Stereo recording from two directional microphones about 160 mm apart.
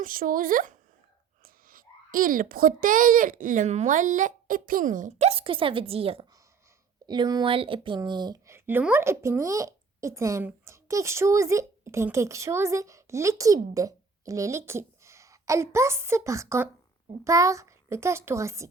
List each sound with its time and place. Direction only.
0.0 s a child's voice: 60° right (ahead or behind); by 6.2 s 35° right (ahead or behind)
7.1 s a child's voice: 25° right (ahead or behind)
8.4 s a child's voice: 15° right (ahead or behind)